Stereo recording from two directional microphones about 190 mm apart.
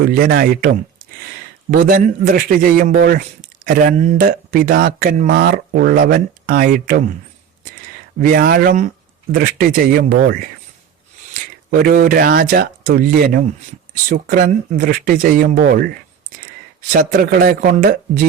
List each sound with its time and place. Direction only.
0.0 s a man's voice: 50° right (ahead or behind)
8.2 s a man's voice: 50° right (ahead or behind)
11.7 s a man's voice: 45° right (ahead or behind)
16.9 s a man's voice: 50° right (ahead or behind)